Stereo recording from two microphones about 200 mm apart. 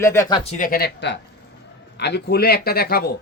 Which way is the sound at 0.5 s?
45° left (ahead or behind).